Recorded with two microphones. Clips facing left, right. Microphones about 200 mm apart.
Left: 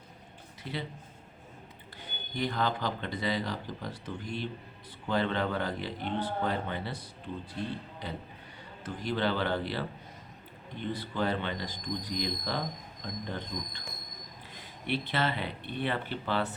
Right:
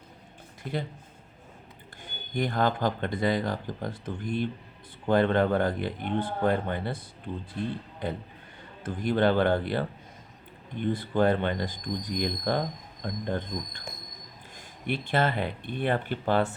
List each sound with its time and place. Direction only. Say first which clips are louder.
0.6 s speech: right 5 dB; 50° right (ahead or behind)
2.0 s speech: right 4 dB; 50° right (ahead or behind)